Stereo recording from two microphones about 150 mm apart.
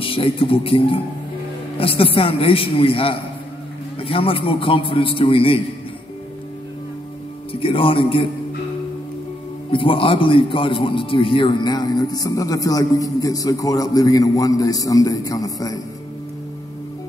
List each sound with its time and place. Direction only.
0.0 s a man's voice: 35° left (ahead or behind)
7.6 s a man's voice: 35° left (ahead or behind)
9.7 s a man's voice: 35° left (ahead or behind)